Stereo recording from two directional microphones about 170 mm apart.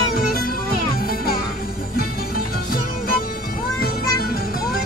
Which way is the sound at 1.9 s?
60° left (ahead or behind).